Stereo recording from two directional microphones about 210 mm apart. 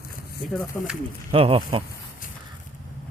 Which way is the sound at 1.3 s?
25° right (ahead or behind).